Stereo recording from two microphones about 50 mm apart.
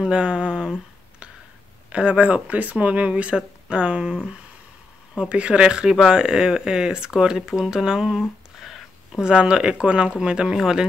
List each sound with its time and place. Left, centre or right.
0.0 s speech: centre
1.9 s speech: right
5.3 s speech: right
8.2 s a sound: centre
9.2 s speech: centre